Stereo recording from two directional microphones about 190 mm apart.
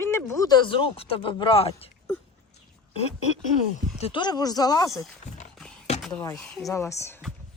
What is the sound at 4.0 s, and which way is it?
Speech, 25° left (ahead or behind).